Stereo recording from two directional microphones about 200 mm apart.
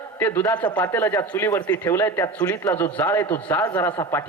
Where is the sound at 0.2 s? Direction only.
10° left (ahead or behind).